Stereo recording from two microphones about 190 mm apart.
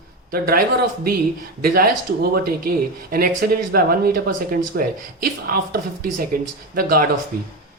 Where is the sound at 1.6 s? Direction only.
55° right (ahead or behind).